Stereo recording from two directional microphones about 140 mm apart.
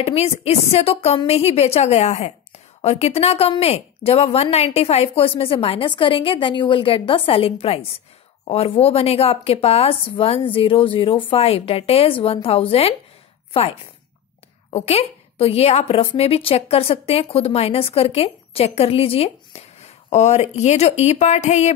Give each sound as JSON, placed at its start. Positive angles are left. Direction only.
{"t": 0.0, "sound": "a woman's voice", "side_deg": 45}